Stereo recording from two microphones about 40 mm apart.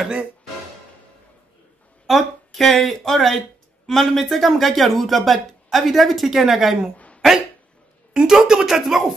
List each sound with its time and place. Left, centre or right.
2.0 s speech: centre
8.1 s a sound: centre
8.6 s speech: centre